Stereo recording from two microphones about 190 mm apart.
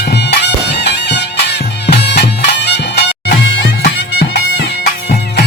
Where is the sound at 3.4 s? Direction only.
65° left (ahead or behind).